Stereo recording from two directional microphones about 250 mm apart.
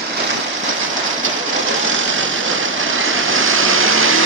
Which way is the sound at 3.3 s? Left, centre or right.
Right.